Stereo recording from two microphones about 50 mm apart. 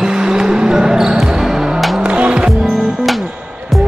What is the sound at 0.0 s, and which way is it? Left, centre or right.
Basketball bounce, centre.